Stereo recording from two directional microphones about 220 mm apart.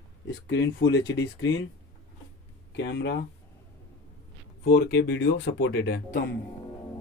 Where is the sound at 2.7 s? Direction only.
55° left (ahead or behind).